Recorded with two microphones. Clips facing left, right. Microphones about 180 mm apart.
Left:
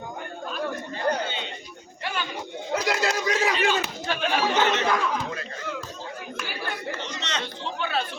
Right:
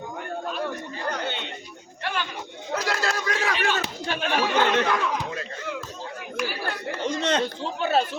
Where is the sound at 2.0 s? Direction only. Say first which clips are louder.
Right 2 dB; 5° left (ahead or behind).